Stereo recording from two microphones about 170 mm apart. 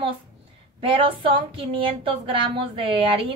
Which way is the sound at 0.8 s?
30° right (ahead or behind).